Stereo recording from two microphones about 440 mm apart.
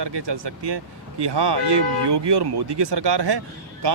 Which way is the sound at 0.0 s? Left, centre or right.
Right.